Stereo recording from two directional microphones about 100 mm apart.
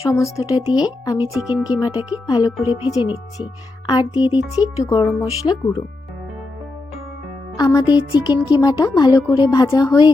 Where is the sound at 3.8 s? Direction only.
45° left (ahead or behind).